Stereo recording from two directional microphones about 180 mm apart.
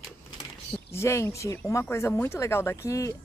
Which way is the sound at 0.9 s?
15° left (ahead or behind).